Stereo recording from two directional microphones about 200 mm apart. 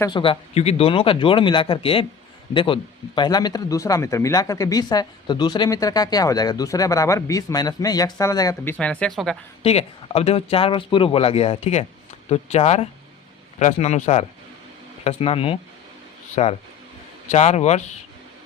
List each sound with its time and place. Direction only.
0.0 s speech: 25° left (ahead or behind)
8.8 s speech: 5° left (ahead or behind)
9.6 s a man's voice: 30° left (ahead or behind)